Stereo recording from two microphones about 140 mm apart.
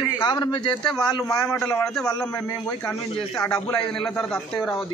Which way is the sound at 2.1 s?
20° left (ahead or behind).